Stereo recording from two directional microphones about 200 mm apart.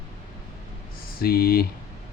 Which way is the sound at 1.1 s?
50° left (ahead or behind).